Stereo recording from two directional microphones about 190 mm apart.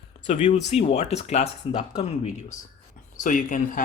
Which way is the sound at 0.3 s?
35° left (ahead or behind).